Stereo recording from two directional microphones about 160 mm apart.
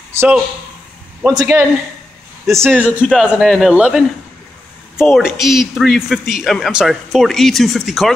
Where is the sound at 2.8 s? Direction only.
5° right (ahead or behind).